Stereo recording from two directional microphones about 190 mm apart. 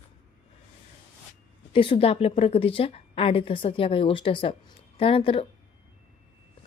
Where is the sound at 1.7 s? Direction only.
25° left (ahead or behind).